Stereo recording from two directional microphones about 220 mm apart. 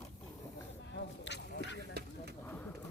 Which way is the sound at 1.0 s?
55° left (ahead or behind).